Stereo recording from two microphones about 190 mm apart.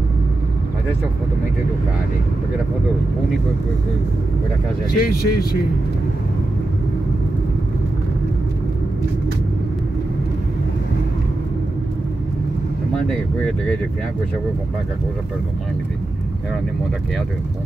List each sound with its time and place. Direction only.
5.0 s speech: 55° left (ahead or behind)